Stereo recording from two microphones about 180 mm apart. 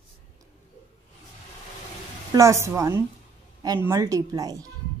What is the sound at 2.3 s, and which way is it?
Speech, 15° right (ahead or behind).